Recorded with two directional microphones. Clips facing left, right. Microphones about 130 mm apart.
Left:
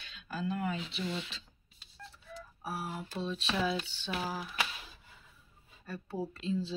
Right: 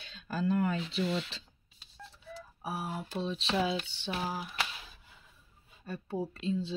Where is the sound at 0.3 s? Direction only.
45° right (ahead or behind).